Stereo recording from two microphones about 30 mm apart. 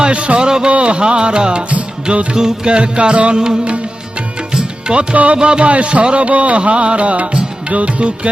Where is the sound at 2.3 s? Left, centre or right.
Right.